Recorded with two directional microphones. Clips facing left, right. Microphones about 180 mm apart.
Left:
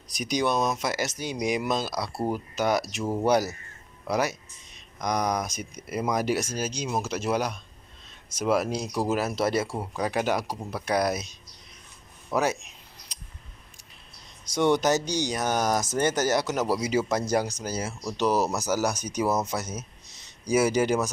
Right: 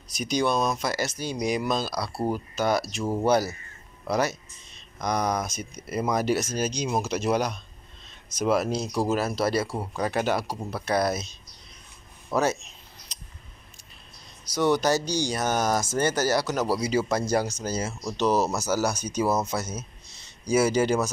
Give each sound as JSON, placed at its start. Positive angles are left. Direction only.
{"t": 0.1, "sound": "speech", "side_deg": 15}
{"t": 3.0, "sound": "speech", "side_deg": 0}
{"t": 9.7, "sound": "speech", "side_deg": 0}
{"t": 12.4, "sound": "speech", "side_deg": 15}
{"t": 14.5, "sound": "speech", "side_deg": 25}